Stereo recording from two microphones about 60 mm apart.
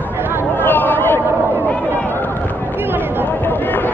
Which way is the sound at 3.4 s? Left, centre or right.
Left.